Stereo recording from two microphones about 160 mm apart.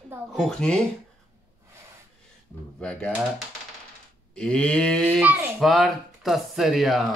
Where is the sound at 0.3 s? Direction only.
Centre (ahead or behind).